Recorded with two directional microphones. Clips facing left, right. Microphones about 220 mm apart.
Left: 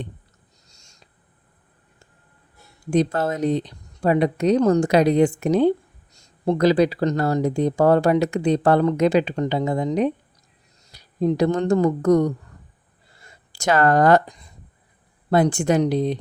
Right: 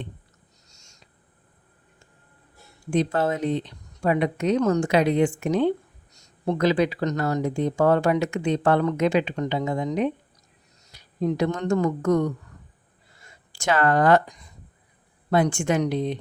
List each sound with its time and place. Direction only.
0.7 s owl: 35° left (ahead or behind)
2.9 s speech: 40° left (ahead or behind)